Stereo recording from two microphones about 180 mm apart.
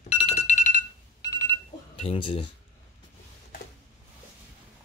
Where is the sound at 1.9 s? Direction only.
30° left (ahead or behind).